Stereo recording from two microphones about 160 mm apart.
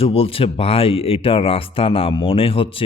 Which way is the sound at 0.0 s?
35° left (ahead or behind).